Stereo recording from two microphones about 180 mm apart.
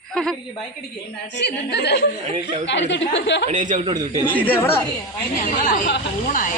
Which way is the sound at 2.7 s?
80° left.